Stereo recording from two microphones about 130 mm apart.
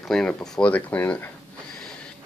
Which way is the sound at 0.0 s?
5° left (ahead or behind).